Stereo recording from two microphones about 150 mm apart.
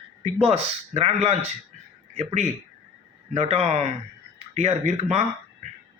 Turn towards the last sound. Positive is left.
turn(degrees=-50)  # may be behind; listen again after turning